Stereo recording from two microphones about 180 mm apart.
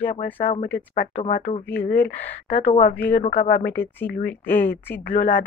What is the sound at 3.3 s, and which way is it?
Speech, 50° left (ahead or behind).